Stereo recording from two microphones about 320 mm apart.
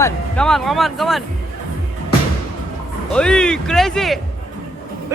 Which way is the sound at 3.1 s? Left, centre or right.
Centre.